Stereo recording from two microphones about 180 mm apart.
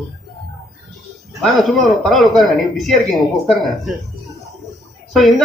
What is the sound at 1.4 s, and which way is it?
Speech, centre (ahead or behind).